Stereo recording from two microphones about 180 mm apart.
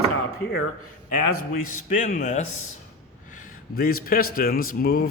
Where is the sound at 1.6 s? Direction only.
45° left (ahead or behind).